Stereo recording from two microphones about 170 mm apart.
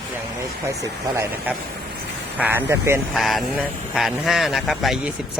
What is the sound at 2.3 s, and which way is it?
Speech, 10° right (ahead or behind).